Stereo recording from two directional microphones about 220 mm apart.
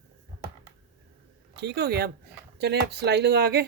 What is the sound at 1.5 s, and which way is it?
Speech, 50° right (ahead or behind).